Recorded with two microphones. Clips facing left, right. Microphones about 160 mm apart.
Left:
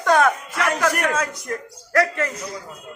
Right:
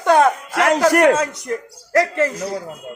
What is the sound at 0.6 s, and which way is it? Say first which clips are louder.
Speech: right 11 dB; 90° right.